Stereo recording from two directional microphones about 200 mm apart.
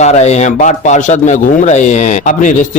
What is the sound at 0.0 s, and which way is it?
A man's voice, 35° left (ahead or behind).